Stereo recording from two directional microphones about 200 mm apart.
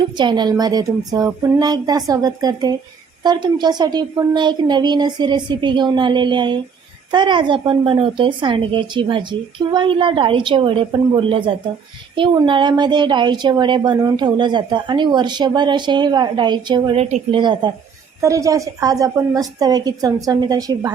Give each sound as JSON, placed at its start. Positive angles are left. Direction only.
{"t": 0.2, "sound": "a woman's voice", "side_deg": -20}
{"t": 17.4, "sound": "a woman's voice", "side_deg": -20}